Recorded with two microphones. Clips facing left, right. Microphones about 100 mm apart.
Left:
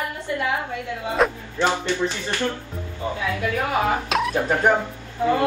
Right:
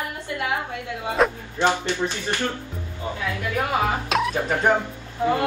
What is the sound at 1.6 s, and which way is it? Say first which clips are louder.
Speech: even; 15° right (ahead or behind).